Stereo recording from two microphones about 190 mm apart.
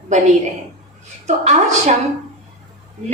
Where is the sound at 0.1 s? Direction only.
35° right (ahead or behind).